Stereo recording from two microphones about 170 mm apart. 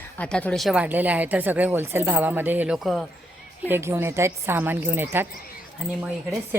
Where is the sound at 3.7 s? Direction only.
15° right (ahead or behind).